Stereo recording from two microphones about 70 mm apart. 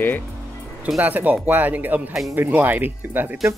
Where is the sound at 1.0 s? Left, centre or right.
Right.